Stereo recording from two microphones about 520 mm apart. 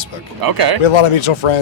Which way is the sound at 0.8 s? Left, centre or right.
Left.